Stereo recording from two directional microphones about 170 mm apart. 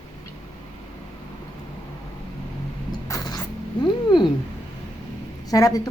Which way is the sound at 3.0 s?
20° left (ahead or behind).